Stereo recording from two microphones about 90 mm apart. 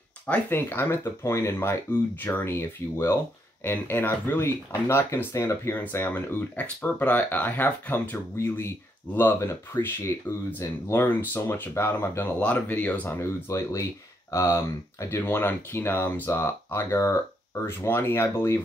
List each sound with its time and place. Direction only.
0.3 s speech: 25° left (ahead or behind)
13.2 s speech: 30° left (ahead or behind)